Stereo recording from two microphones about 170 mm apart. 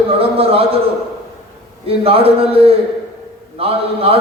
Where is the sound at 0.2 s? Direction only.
35° right (ahead or behind).